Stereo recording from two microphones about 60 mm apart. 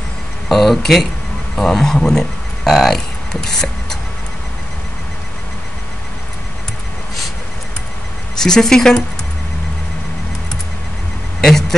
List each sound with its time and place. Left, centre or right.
0.5 s speech: centre
3.4 s a sound: centre
8.4 s speech: centre